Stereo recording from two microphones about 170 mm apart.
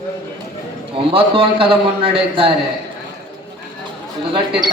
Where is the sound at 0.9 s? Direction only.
35° right (ahead or behind).